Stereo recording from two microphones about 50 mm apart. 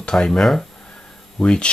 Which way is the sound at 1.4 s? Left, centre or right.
Left.